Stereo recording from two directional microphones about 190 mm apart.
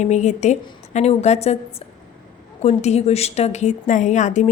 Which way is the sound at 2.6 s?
35° left (ahead or behind).